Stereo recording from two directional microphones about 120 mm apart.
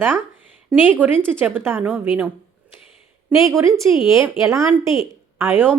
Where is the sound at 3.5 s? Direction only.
20° right (ahead or behind).